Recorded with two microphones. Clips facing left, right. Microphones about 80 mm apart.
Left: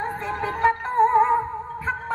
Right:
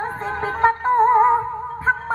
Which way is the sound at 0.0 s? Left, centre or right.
Right.